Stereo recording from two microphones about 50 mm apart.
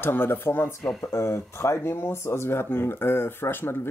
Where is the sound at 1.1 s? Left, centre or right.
Left.